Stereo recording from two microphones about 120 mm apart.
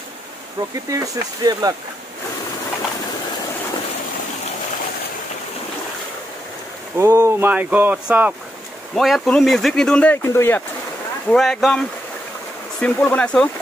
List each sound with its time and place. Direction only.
0.8 s speech: 30° right (ahead or behind)
7.0 s speech: 25° right (ahead or behind)
8.9 s speech: centre (ahead or behind)
10.2 s speech: 20° left (ahead or behind)
11.2 s speech: 5° left (ahead or behind)
12.8 s speech: 10° left (ahead or behind)